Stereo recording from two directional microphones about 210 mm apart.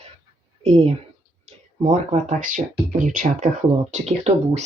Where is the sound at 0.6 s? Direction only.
30° right (ahead or behind).